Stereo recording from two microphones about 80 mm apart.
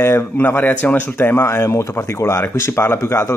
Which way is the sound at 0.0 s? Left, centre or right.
Left.